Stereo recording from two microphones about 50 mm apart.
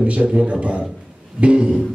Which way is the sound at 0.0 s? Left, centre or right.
Right.